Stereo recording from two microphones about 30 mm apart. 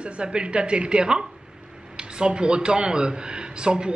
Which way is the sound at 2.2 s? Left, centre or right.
Right.